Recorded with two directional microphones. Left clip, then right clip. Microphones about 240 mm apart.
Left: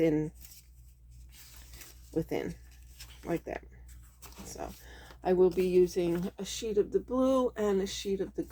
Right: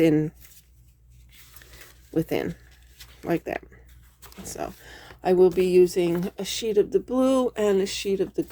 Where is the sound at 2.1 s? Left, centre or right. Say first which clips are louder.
Right 8 dB; right.